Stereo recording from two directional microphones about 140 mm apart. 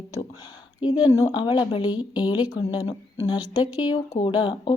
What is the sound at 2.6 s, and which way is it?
Speech, 40° left (ahead or behind).